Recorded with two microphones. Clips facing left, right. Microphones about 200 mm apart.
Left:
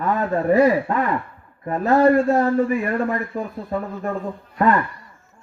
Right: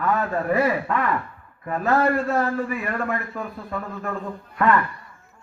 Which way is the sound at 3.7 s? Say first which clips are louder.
Left 6 dB; 35° left (ahead or behind).